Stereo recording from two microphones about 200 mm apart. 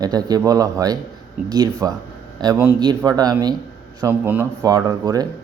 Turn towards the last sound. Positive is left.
turn(degrees=-20)  # may be behind; listen again after turning